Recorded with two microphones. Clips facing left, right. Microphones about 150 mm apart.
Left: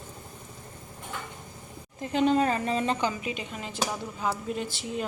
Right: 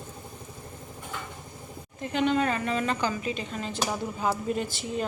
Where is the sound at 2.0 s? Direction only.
35° left (ahead or behind); by 3.8 s 10° left (ahead or behind).